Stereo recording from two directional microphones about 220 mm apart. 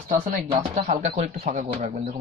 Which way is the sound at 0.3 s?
30° right (ahead or behind).